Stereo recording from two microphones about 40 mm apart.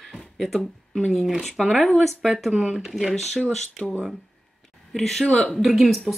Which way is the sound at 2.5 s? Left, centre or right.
Centre.